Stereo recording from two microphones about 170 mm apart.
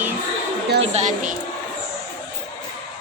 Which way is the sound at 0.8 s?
40° right (ahead or behind).